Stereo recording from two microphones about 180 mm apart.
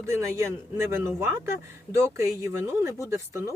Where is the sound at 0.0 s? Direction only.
15° right (ahead or behind).